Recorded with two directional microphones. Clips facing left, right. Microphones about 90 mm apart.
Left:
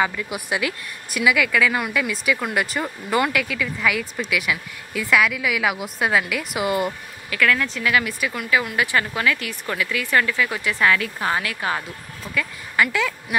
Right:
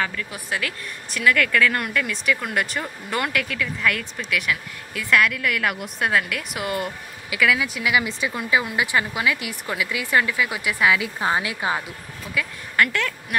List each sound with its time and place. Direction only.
0.0 s speech: 15° left (ahead or behind)
7.2 s speech: 10° right (ahead or behind)
12.4 s speech: 5° left (ahead or behind)